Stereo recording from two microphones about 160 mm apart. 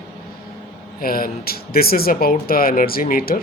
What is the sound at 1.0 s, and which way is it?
Speech, 65° left (ahead or behind).